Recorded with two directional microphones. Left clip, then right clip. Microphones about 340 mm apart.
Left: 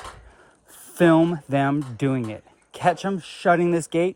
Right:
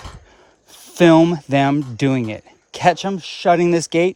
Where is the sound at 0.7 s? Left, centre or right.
Right.